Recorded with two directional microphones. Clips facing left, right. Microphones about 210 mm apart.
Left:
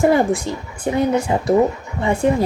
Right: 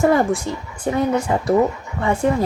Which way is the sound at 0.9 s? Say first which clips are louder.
Left 1 dB; 15° left (ahead or behind).